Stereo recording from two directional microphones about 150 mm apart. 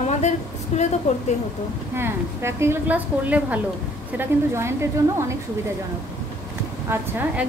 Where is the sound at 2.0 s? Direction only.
15° right (ahead or behind).